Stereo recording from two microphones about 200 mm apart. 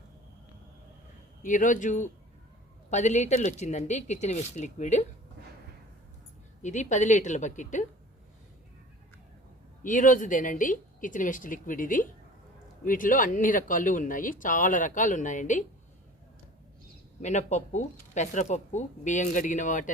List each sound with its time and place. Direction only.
1.4 s speech: 40° left (ahead or behind)
6.6 s speech: 35° left (ahead or behind)
9.8 s speech: 40° left (ahead or behind)
17.2 s speech: 35° left (ahead or behind)